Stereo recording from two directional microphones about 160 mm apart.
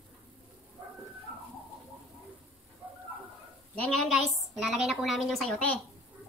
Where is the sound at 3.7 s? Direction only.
5° left (ahead or behind).